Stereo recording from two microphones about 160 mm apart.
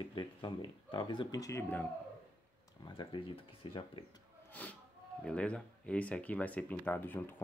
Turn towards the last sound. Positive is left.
turn(degrees=15)  # may be behind; listen again after turning